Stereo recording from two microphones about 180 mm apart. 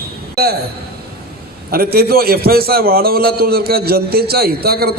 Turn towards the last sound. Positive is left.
turn(degrees=-60)  # may be behind; listen again after turning